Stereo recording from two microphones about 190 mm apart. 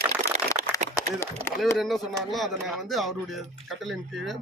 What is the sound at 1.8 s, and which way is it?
A man's voice, centre (ahead or behind).